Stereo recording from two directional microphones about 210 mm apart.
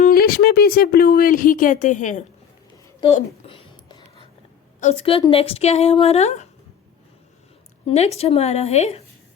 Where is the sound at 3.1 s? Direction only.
30° left (ahead or behind).